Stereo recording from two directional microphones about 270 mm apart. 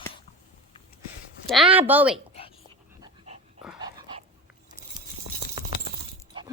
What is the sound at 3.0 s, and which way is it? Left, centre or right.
Dog, right.